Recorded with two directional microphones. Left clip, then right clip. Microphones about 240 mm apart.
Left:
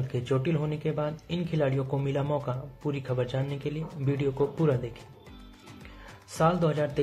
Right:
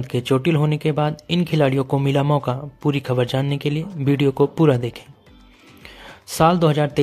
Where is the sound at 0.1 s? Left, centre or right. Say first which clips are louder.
Right 10 dB; right.